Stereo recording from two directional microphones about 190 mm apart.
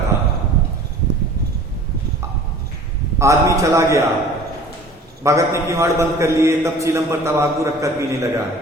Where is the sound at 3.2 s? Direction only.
15° right (ahead or behind).